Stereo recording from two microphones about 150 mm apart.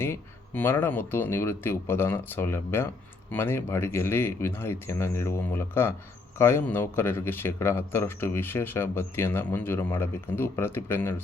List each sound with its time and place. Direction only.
0.0 s speech: 15° left (ahead or behind)